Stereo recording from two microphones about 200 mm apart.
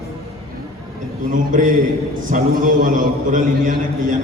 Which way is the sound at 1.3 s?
40° right (ahead or behind).